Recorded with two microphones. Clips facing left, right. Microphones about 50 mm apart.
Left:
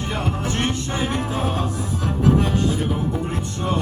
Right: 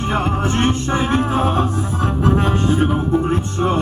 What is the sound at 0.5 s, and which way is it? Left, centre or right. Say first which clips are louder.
Music: right 6 dB; right.